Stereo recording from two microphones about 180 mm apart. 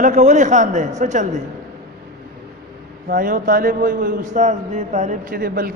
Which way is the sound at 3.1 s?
50° right (ahead or behind).